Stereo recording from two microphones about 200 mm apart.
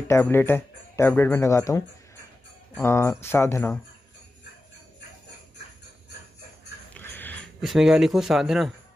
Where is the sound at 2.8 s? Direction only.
15° left (ahead or behind).